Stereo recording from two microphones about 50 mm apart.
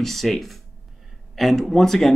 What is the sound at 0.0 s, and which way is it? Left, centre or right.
Speech, centre.